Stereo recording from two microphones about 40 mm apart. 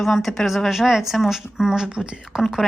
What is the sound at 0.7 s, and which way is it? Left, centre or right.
Speech, centre.